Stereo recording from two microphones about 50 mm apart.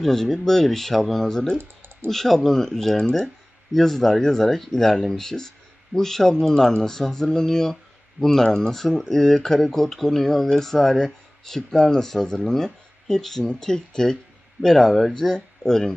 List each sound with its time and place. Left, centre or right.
0.0 s speech: centre
1.6 s typing: right
2.0 s speech: centre